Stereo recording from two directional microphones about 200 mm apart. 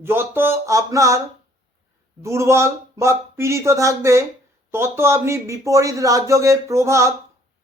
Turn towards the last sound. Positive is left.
turn(degrees=-15)  # may be behind; listen again after turning